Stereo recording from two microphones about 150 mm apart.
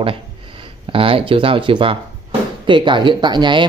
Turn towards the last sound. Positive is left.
turn(degrees=-30)  # may be behind; listen again after turning